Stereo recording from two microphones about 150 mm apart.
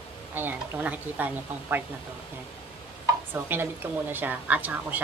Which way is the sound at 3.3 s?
15° right (ahead or behind).